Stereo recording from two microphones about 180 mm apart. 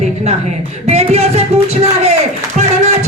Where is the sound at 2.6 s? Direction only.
40° right (ahead or behind).